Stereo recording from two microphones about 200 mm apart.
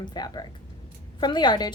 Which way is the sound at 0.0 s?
20° left (ahead or behind).